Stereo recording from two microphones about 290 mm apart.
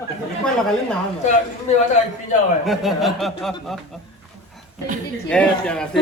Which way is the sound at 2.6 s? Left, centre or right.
Centre.